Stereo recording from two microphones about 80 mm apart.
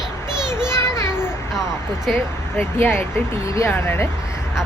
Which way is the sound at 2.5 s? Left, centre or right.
Left.